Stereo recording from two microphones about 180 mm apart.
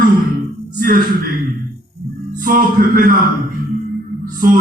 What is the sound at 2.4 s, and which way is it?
Speech, 50° right (ahead or behind).